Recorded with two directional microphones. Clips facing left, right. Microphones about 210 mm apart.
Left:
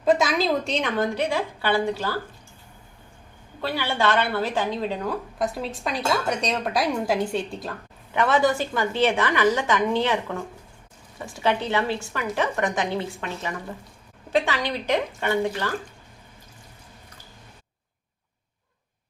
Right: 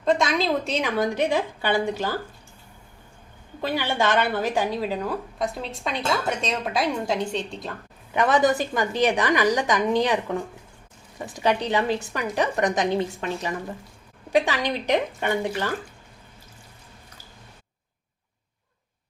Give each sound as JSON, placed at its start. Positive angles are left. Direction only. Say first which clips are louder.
{"t": 0.0, "sound": "a woman's voice", "louder": "left 1 dB", "side_deg": 5}
{"t": 3.6, "sound": "a woman's voice", "louder": "right 1 dB", "side_deg": -15}
{"t": 8.1, "sound": "a woman's voice", "louder": "right 1 dB", "side_deg": -15}
{"t": 11.3, "sound": "a woman's voice", "louder": "right 1 dB", "side_deg": -15}